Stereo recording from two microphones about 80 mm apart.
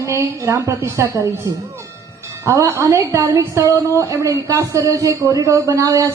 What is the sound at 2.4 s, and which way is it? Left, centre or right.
A woman's voice, right.